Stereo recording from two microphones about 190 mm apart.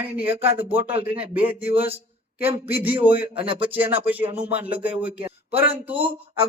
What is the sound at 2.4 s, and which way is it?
Speech, 10° right (ahead or behind).